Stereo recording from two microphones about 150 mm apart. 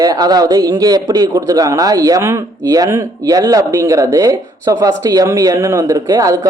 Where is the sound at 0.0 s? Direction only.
25° right (ahead or behind).